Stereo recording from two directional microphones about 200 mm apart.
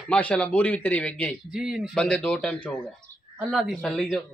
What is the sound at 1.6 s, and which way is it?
A man's voice, 5° right (ahead or behind).